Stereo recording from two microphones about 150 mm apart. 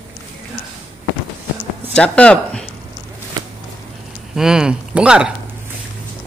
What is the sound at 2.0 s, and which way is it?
Speech, 5° left (ahead or behind).